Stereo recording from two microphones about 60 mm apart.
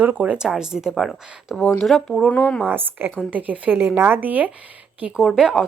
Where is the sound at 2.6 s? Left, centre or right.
Right.